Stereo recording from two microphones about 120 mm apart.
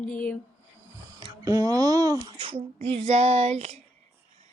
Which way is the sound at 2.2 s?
45° right (ahead or behind).